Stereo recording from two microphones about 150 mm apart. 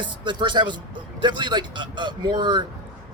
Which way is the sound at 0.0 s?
30° right (ahead or behind).